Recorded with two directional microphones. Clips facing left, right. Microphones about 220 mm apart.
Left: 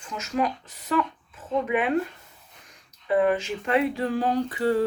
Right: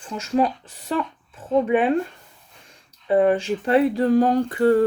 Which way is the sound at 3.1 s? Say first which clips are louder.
Right 4 dB; 30° right (ahead or behind).